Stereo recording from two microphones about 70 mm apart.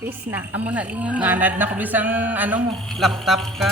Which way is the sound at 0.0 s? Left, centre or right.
Right.